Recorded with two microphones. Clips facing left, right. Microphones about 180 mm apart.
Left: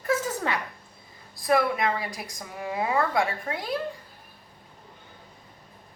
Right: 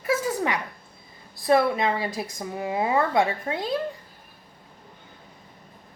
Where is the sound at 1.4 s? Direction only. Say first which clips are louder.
Right 3 dB; 25° right (ahead or behind).